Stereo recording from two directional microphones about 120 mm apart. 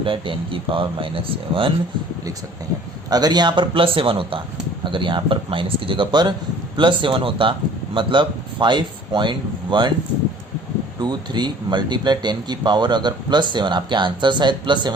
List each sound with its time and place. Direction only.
0.0 s speech: 45° right (ahead or behind)
3.1 s speech: 35° right (ahead or behind)
11.0 s speech: 35° right (ahead or behind)